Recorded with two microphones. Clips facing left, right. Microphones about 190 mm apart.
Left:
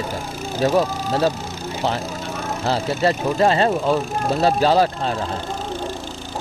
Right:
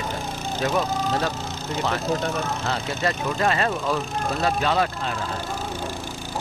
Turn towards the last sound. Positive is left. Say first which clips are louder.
# left 6 dB
turn(degrees=35)  # may be behind; listen again after turning